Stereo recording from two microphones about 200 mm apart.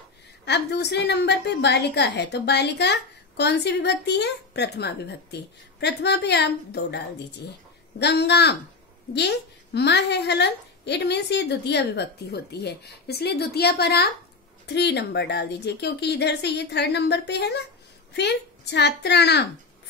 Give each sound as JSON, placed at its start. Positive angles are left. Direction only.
{"t": 0.5, "sound": "a woman's voice", "side_deg": 55}
{"t": 8.0, "sound": "a woman's voice", "side_deg": 55}